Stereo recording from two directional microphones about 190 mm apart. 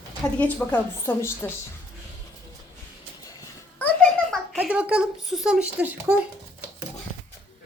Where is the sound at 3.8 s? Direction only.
10° left (ahead or behind).